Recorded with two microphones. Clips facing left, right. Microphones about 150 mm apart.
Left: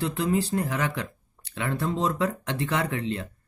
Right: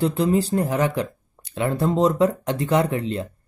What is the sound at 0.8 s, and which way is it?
Speech, 25° right (ahead or behind).